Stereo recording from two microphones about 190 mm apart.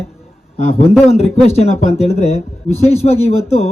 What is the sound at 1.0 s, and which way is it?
A man's voice, 35° left (ahead or behind).